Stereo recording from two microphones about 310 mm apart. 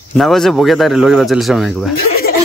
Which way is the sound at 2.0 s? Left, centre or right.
Left.